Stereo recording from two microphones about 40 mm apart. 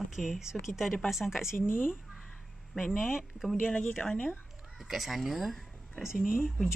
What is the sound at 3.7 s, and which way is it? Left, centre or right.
Speech, left.